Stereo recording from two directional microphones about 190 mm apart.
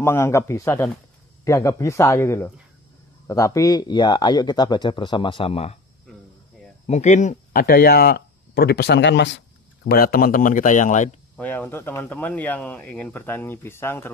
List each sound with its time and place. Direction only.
0.0 s speech: 15° left (ahead or behind); by 5.8 s 30° left (ahead or behind)
6.9 s speech: 40° left (ahead or behind); by 9.4 s 65° left (ahead or behind)
9.8 s speech: 55° left (ahead or behind)
11.3 s speech: 10° left (ahead or behind)